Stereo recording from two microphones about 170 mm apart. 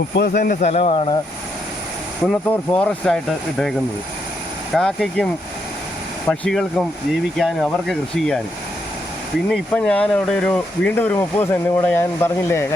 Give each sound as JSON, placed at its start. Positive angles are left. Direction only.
{"t": 0.2, "sound": "speech", "side_deg": 65}
{"t": 0.6, "sound": "speech", "side_deg": 40}
{"t": 2.2, "sound": "speech", "side_deg": 5}
{"t": 4.7, "sound": "speech", "side_deg": 5}
{"t": 9.5, "sound": "speech", "side_deg": 5}